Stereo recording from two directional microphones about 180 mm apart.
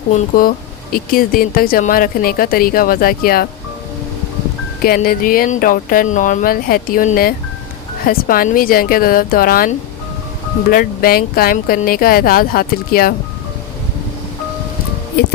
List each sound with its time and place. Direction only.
0.1 s speech: 45° left (ahead or behind)
4.8 s speech: 55° left (ahead or behind)